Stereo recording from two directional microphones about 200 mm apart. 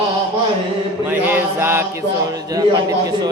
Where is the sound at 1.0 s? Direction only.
10° right (ahead or behind).